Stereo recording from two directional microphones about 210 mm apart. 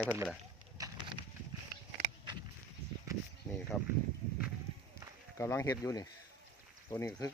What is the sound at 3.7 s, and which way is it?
Speech, 5° left (ahead or behind).